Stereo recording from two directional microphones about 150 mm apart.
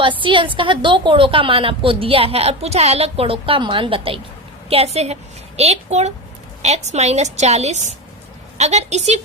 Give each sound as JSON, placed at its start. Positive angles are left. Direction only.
{"t": 0.2, "sound": "a woman's voice", "side_deg": -35}